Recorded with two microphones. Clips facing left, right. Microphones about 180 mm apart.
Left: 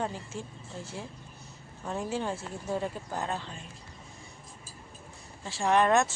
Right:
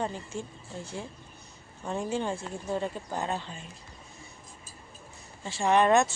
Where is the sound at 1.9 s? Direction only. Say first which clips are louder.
Right 2 dB; 5° left (ahead or behind).